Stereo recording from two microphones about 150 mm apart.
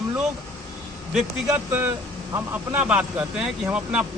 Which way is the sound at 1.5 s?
15° right (ahead or behind).